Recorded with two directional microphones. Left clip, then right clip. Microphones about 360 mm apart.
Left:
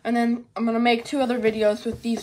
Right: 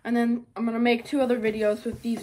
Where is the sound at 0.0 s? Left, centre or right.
Centre.